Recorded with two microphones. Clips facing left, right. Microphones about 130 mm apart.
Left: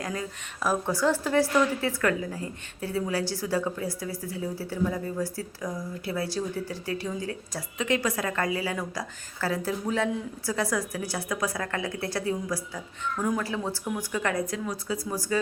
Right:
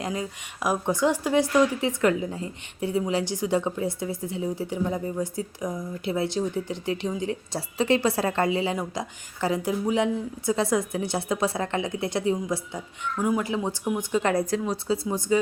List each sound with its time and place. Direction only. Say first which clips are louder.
0.0 s a woman's voice: right 3 dB; 20° right (ahead or behind)
13.1 s a woman's voice: right 4 dB; 10° right (ahead or behind)